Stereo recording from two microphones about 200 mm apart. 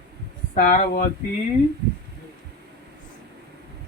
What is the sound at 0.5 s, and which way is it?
Speech, 40° left (ahead or behind).